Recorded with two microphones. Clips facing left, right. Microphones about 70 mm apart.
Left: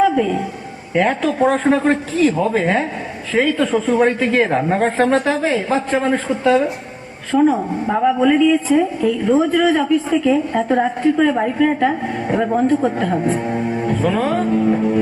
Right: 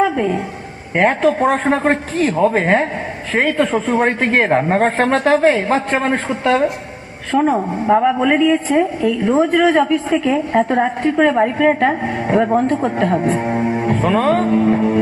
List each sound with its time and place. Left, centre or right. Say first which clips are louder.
0.0 s a sound: left 1 dB; right
0.9 s a woman's voice: right 2 dB; right
9.2 s a woman's voice: right 2 dB; right